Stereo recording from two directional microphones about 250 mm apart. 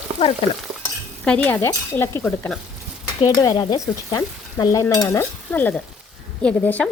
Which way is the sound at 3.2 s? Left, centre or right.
Centre.